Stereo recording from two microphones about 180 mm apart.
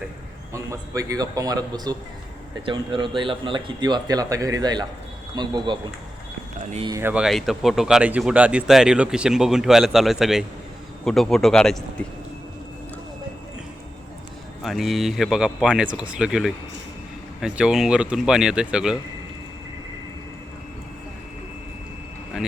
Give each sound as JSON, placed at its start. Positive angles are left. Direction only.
{"t": 0.5, "sound": "speech", "side_deg": -15}
{"t": 6.8, "sound": "speech", "side_deg": -20}
{"t": 7.1, "sound": "speech", "side_deg": 0}
{"t": 14.6, "sound": "speech", "side_deg": 0}